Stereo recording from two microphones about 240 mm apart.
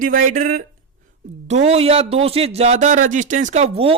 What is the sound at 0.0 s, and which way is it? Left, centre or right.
Speech, right.